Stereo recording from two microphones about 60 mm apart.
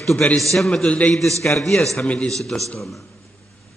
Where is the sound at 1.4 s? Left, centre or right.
Centre.